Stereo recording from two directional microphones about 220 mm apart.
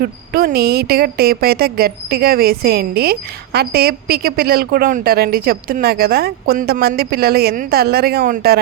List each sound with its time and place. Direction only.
0.0 s speech: 40° right (ahead or behind)